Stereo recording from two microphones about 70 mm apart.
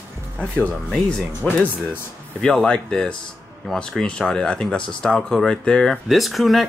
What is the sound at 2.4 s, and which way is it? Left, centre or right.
Speech, centre.